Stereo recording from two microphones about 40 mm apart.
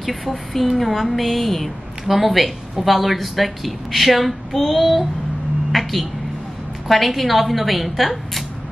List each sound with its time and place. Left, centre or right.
0.0 s speech: centre
5.7 s a sound: centre
6.9 s speech: centre